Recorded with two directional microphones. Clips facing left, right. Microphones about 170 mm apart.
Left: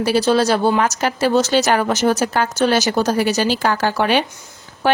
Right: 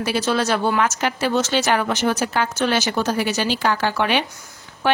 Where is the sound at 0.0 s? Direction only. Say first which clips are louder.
Left 5 dB; 35° left (ahead or behind).